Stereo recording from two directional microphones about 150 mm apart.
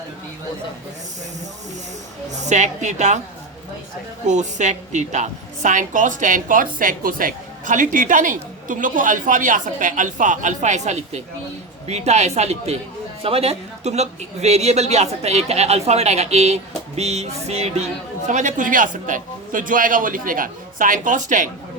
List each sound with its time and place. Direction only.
2.3 s speech: 50° right (ahead or behind)
4.3 s a woman's voice: 50° right (ahead or behind)
18.3 s a woman's voice: 55° right (ahead or behind)